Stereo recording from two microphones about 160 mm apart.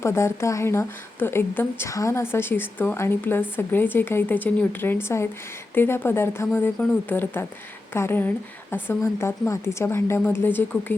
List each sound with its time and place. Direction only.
0.0 s speech: 15° left (ahead or behind)